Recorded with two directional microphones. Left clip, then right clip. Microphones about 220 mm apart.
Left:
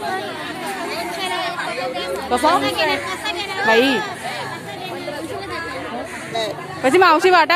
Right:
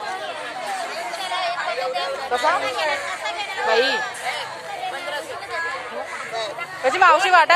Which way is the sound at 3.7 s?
10° left (ahead or behind).